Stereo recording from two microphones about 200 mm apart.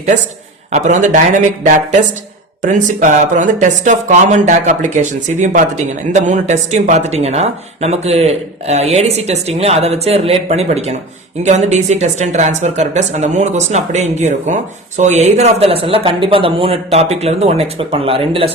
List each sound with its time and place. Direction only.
0.7 s speech: 40° right (ahead or behind)